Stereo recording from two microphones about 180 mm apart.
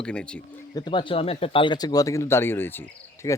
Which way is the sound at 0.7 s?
25° left (ahead or behind).